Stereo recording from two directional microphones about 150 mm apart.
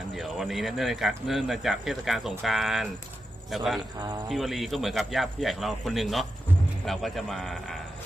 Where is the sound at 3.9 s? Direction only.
25° right (ahead or behind).